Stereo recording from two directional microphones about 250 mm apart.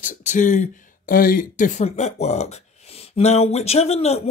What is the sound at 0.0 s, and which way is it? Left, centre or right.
Speech, left.